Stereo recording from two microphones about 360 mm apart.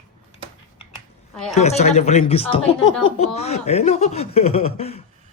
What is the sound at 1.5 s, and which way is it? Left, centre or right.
Speech, centre.